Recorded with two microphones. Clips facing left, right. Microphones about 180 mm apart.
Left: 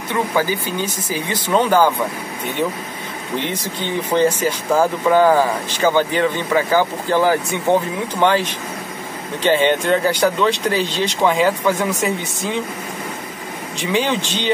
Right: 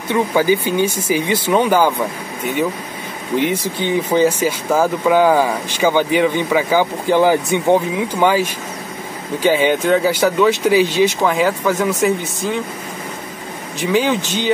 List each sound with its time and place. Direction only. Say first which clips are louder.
0.1 s speech: right 5 dB; 15° right (ahead or behind)
3.3 s speech: right 6 dB; 10° right (ahead or behind)
13.7 s speech: right 3 dB; 5° right (ahead or behind)